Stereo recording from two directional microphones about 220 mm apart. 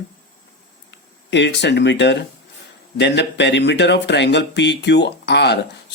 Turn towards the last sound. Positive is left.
turn(degrees=50)  # may be behind; listen again after turning